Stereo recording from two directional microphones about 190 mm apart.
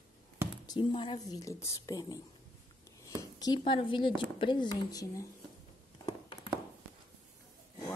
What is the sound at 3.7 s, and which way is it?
Speech, 25° left (ahead or behind).